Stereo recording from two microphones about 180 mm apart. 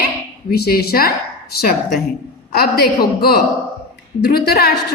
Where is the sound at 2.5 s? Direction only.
60° left (ahead or behind).